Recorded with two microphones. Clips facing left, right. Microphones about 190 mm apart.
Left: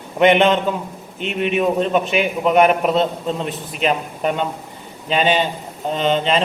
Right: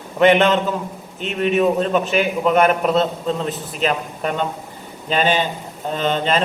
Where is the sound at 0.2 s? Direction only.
10° left (ahead or behind).